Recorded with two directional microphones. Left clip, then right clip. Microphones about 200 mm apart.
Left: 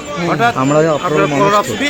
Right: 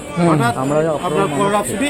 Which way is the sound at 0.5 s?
75° left (ahead or behind).